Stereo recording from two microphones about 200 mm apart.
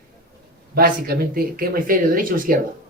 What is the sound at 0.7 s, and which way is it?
Speech, 50° right (ahead or behind).